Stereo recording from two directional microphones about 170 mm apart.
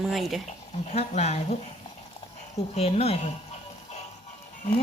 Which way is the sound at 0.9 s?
40° left (ahead or behind).